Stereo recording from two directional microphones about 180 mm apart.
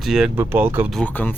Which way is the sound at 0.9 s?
10° left (ahead or behind).